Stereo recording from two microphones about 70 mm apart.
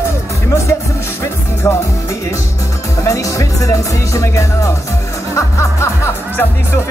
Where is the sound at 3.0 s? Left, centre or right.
Left.